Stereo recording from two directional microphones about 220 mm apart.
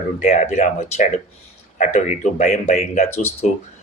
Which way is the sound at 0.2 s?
35° left (ahead or behind).